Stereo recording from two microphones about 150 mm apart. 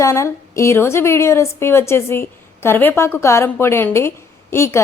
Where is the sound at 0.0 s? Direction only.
20° left (ahead or behind).